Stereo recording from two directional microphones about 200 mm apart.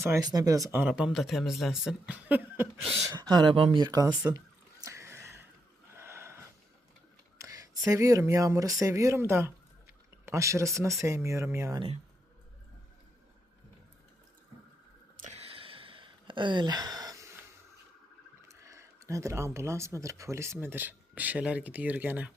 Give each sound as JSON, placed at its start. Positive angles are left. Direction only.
{"t": 0.0, "sound": "speech", "side_deg": -15}
{"t": 3.1, "sound": "speech", "side_deg": -20}
{"t": 4.9, "sound": "a sound", "side_deg": -15}
{"t": 5.9, "sound": "gasp", "side_deg": -15}
{"t": 7.3, "sound": "speech", "side_deg": -15}
{"t": 15.2, "sound": "a sound", "side_deg": -30}
{"t": 18.4, "sound": "speech", "side_deg": -15}